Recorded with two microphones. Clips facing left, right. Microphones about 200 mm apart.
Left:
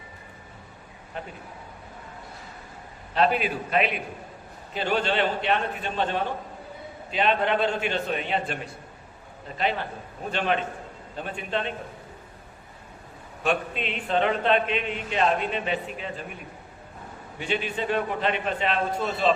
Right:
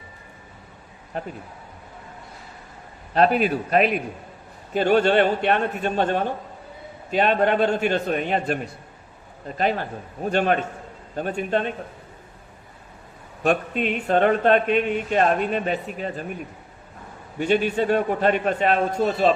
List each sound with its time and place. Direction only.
1.1 s a man's voice: 40° right (ahead or behind)
3.2 s a man's voice: 45° right (ahead or behind)
10.2 s a man's voice: 45° right (ahead or behind)
13.4 s a man's voice: 45° right (ahead or behind)
17.4 s a man's voice: 45° right (ahead or behind)